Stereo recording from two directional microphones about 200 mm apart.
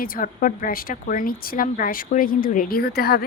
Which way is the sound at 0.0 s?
45° left (ahead or behind).